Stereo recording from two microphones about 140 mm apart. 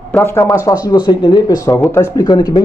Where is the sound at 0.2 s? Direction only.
20° left (ahead or behind).